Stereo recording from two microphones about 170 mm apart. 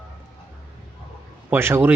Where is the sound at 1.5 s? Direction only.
15° right (ahead or behind).